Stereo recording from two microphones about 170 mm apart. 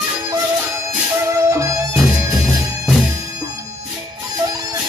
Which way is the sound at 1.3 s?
20° right (ahead or behind).